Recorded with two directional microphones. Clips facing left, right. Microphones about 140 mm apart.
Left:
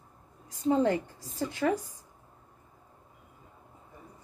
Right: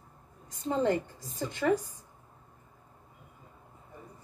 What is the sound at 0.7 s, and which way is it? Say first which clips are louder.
A woman's voice: left 3 dB; 5° left (ahead or behind).